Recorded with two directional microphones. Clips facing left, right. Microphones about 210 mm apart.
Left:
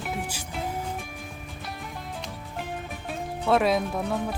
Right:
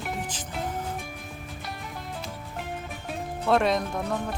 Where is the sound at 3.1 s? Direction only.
Centre (ahead or behind).